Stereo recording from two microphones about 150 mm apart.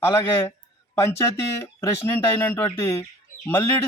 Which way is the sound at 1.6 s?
20° left (ahead or behind).